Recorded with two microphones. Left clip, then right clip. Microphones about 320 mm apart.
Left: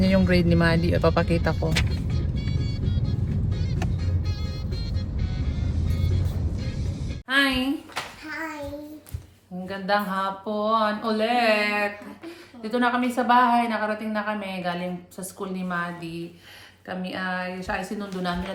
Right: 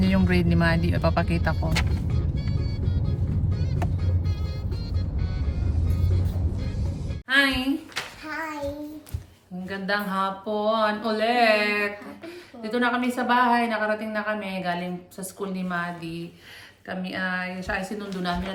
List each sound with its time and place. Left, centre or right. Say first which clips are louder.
0.0 s a woman's voice: left 3 dB; centre
7.3 s speech: right 1 dB; centre
9.6 s a sound: left 3 dB; centre
12.6 s a woman's voice: left 1 dB; centre